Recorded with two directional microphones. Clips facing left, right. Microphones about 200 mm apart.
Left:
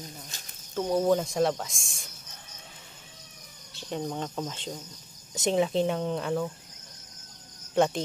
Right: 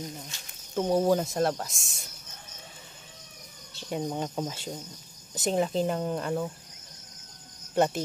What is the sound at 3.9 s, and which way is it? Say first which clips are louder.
Speech: right 1 dB; 10° right (ahead or behind).